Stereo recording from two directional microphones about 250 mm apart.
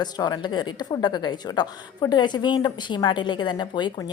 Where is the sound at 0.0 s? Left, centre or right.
Centre.